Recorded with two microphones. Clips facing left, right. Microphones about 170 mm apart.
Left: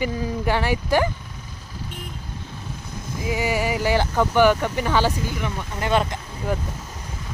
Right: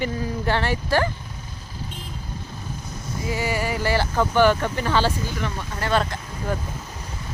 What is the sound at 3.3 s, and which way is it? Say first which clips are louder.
Speech: left 2 dB; 15° left (ahead or behind).